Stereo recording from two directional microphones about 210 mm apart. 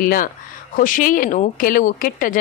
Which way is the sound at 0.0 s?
40° left (ahead or behind).